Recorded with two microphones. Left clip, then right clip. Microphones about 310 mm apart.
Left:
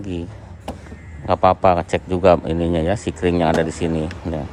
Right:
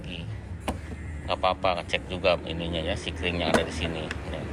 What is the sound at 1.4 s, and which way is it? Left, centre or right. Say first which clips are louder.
A man's voice: left 11 dB; left.